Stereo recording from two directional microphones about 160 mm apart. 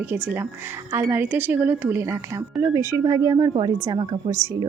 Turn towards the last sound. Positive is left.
turn(degrees=-15)  # may be behind; listen again after turning